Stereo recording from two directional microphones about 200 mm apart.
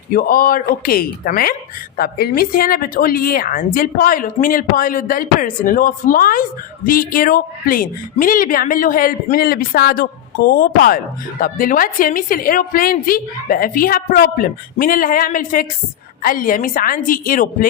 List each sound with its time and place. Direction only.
0.1 s a woman's voice: 45° left (ahead or behind)